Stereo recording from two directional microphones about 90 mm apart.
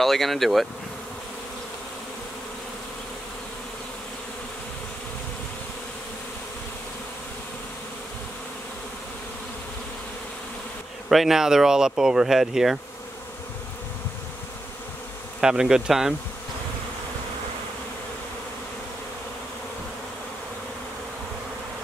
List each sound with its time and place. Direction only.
0.0 s speech: centre (ahead or behind)
11.1 s speech: 5° right (ahead or behind)
15.4 s speech: 5° right (ahead or behind)